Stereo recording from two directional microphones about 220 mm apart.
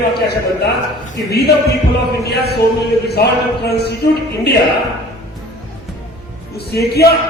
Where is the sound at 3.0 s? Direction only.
45° left (ahead or behind).